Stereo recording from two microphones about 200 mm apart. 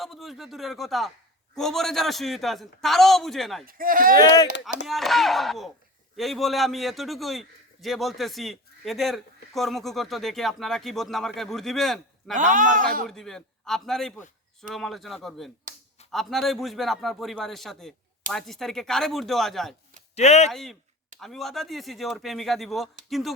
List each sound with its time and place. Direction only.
0.0 s a man's voice: centre (ahead or behind)
3.7 s speech: 45° right (ahead or behind)
4.1 s speech: 20° left (ahead or behind)
4.9 s a man's voice: centre (ahead or behind)
12.3 s speech: 40° right (ahead or behind)
13.1 s a man's voice: centre (ahead or behind)
20.1 s speech: 35° left (ahead or behind)
20.5 s a man's voice: centre (ahead or behind)